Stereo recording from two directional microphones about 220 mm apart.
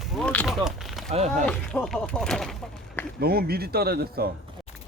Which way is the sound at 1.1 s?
30° right (ahead or behind).